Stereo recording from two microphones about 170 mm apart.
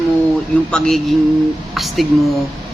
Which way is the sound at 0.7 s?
Centre (ahead or behind).